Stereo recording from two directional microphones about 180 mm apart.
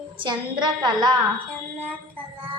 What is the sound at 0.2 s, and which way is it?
A woman's voice, 25° right (ahead or behind).